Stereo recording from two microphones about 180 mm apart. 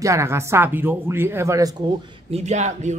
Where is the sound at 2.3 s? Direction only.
40° right (ahead or behind).